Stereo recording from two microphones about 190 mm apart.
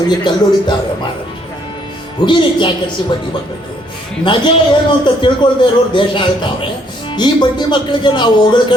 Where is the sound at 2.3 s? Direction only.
25° left (ahead or behind).